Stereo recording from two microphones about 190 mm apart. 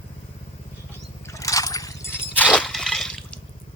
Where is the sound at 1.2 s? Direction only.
15° left (ahead or behind).